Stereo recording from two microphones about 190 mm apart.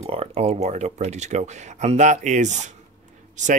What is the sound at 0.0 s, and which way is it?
Speech, 30° right (ahead or behind).